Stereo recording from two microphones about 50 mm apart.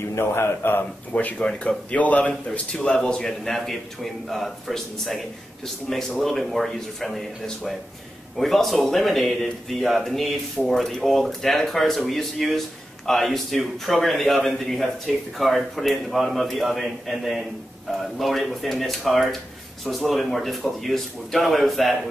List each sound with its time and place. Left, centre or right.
0.1 s a man's voice: left
1.4 s a man's voice: centre
1.9 s a man's voice: left; by 22.1 s centre